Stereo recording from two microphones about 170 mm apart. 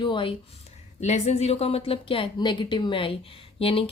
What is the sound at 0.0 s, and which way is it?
Speech, 30° left (ahead or behind).